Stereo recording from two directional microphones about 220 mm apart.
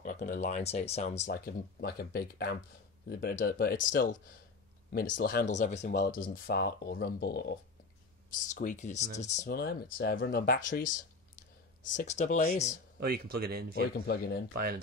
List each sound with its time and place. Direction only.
0.0 s speech: 35° left (ahead or behind)
1.2 s speech: 45° left (ahead or behind)
8.4 s speech: 35° left (ahead or behind)
10.0 s speech: 45° left (ahead or behind)
11.9 s speech: 35° left (ahead or behind)
13.0 s speech: 45° right (ahead or behind)
14.0 s speech: 45° left (ahead or behind)
14.5 s speech: 45° right (ahead or behind)